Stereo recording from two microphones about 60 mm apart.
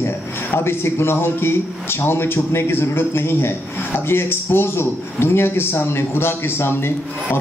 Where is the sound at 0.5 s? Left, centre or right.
Left.